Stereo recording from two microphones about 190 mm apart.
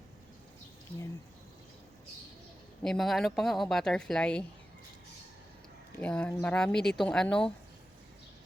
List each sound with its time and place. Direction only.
2.8 s speech: centre (ahead or behind)
6.0 s speech: 5° left (ahead or behind)